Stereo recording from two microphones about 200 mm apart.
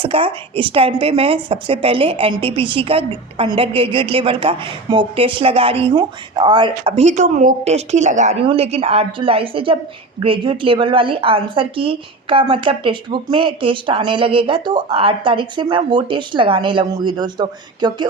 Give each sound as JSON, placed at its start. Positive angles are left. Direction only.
{"t": 0.0, "sound": "a woman's voice", "side_deg": -25}